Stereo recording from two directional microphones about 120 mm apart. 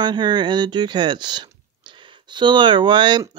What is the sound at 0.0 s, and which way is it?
Speech, 40° right (ahead or behind).